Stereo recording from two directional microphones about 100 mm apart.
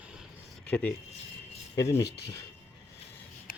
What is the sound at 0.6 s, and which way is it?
Speech, 15° left (ahead or behind).